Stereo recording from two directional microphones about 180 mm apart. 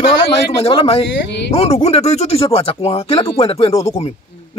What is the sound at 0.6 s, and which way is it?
A man's voice, 30° left (ahead or behind).